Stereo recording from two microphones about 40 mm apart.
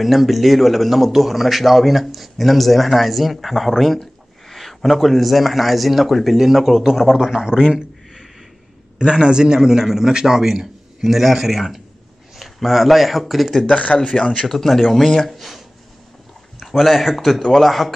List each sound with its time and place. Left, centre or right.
0.0 s a man's voice: centre
7.1 s a man's voice: centre
8.9 s a man's voice: right; by 13.7 s centre
13.7 s speech: left
14.5 s a man's voice: centre